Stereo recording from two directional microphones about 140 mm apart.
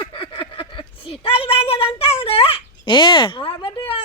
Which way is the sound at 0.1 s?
40° left (ahead or behind).